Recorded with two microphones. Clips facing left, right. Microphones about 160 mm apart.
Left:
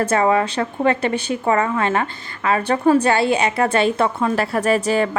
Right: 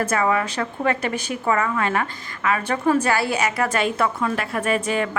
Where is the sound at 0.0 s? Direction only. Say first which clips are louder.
Left 4 dB; 30° left (ahead or behind).